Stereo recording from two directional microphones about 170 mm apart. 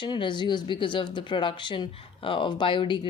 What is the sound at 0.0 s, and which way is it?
A woman's voice, 30° left (ahead or behind).